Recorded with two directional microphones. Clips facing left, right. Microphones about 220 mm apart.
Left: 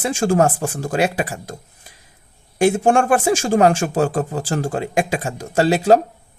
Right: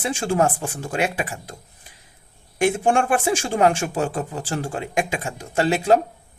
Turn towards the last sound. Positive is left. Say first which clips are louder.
# left 4 dB
turn(degrees=35)  # may be behind; listen again after turning